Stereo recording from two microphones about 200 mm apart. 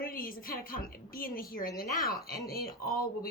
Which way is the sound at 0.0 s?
45° left (ahead or behind).